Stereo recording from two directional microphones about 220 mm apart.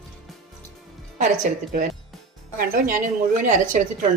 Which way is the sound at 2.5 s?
40° right (ahead or behind).